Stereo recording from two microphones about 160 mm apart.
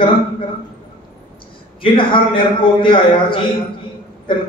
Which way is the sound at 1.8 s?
30° left (ahead or behind).